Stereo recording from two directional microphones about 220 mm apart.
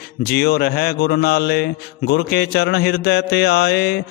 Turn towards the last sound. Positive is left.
turn(degrees=50)  # may be behind; listen again after turning